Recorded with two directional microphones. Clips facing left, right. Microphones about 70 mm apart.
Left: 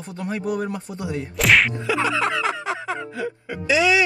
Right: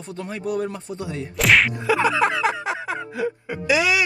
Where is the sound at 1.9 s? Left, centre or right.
Right.